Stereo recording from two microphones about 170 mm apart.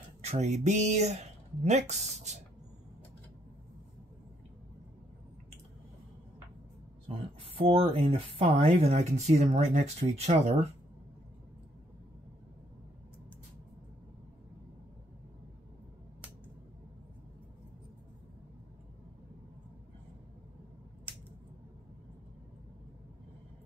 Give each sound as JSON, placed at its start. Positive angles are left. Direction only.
{"t": 0.2, "sound": "speech", "side_deg": -40}
{"t": 7.2, "sound": "speech", "side_deg": -35}